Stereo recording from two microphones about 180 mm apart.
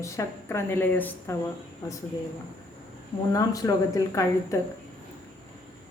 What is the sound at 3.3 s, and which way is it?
Speech, 20° left (ahead or behind).